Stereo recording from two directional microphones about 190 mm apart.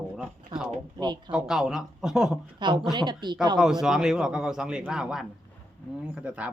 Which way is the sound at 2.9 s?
20° right (ahead or behind).